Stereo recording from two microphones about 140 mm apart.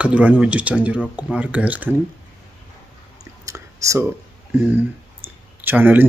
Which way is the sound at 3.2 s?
25° right (ahead or behind).